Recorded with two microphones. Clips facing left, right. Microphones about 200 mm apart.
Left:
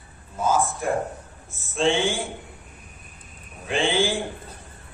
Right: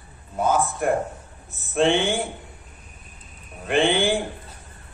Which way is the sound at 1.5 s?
60° right (ahead or behind).